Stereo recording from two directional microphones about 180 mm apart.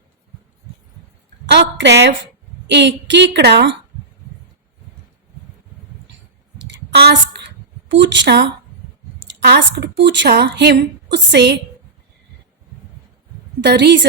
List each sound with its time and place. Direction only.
1.5 s a woman's voice: 75° right (ahead or behind)
6.9 s a sound: 65° right (ahead or behind)
9.4 s a woman's voice: 70° right (ahead or behind)
13.7 s a woman's voice: 70° right (ahead or behind)